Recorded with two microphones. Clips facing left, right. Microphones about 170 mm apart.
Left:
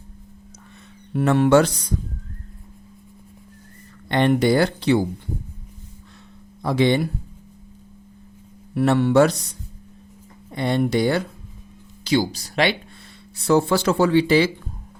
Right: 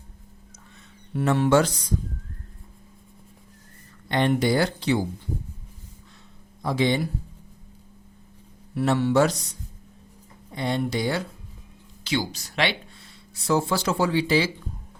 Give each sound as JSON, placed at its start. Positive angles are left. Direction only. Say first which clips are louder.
{"t": 1.1, "sound": "speech", "louder": "left 4 dB", "side_deg": 60}
{"t": 4.1, "sound": "speech", "louder": "left 4 dB", "side_deg": 60}
{"t": 6.6, "sound": "speech", "louder": "left 4 dB", "side_deg": 65}
{"t": 8.7, "sound": "speech", "louder": "left 4 dB", "side_deg": 60}
{"t": 12.0, "sound": "speech", "louder": "left 7 dB", "side_deg": 35}
{"t": 13.5, "sound": "speech", "louder": "left 5 dB", "side_deg": 65}